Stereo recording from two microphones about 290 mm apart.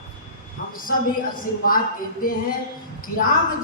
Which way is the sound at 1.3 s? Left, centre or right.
Left.